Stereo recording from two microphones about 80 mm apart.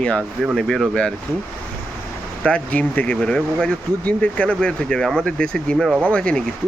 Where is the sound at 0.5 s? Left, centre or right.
Centre.